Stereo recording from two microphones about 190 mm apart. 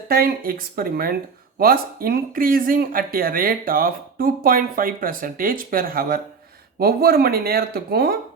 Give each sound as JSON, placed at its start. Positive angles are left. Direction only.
{"t": 0.1, "sound": "speech", "side_deg": -50}